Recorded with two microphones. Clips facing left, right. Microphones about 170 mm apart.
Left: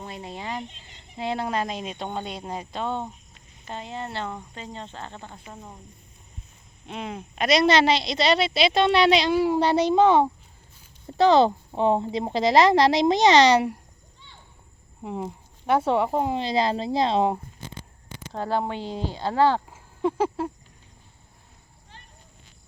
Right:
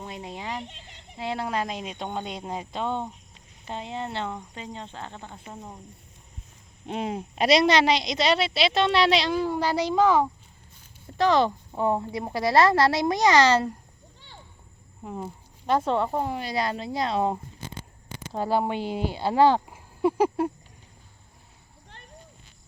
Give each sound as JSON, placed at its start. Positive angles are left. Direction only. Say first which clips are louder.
{"t": 0.1, "sound": "a sound", "louder": "left 1 dB", "side_deg": -15}
{"t": 0.7, "sound": "chicken", "louder": "right 3 dB", "side_deg": -70}
{"t": 1.1, "sound": "speech", "louder": "left 2 dB", "side_deg": -5}
{"t": 6.8, "sound": "speech", "louder": "right 4 dB", "side_deg": -40}
{"t": 7.7, "sound": "speech", "louder": "left 1 dB", "side_deg": -15}
{"t": 9.5, "sound": "a woman's voice", "louder": "left 5 dB", "side_deg": 25}
{"t": 15.0, "sound": "a woman's voice", "louder": "left 3 dB", "side_deg": 15}
{"t": 18.3, "sound": "speech", "louder": "right 2 dB", "side_deg": -10}